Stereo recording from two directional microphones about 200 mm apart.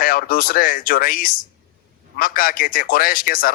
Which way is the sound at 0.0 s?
45° left (ahead or behind).